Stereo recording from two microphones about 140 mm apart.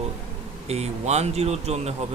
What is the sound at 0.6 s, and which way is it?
Speech, 50° right (ahead or behind).